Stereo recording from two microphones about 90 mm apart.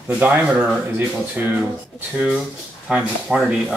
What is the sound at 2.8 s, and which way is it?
Speech, 10° right (ahead or behind).